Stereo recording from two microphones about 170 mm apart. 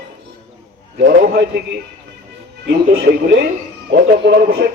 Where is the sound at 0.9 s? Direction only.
70° right (ahead or behind).